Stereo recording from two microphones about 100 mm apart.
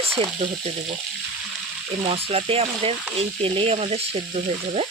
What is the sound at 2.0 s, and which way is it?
Frying, 80° right.